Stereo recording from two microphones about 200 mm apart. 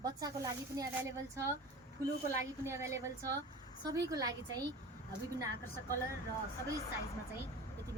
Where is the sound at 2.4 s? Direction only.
15° right (ahead or behind).